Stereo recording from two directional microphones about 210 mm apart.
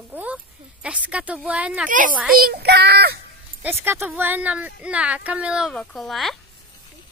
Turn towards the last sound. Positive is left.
turn(degrees=0)  # may be behind; listen again after turning